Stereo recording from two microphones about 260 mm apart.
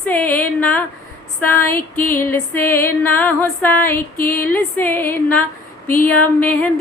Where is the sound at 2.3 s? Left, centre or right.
Centre.